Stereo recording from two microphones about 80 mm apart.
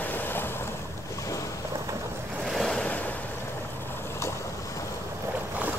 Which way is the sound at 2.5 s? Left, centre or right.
Centre.